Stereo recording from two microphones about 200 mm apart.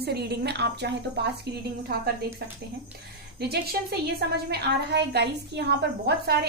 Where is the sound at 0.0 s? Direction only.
55° right (ahead or behind).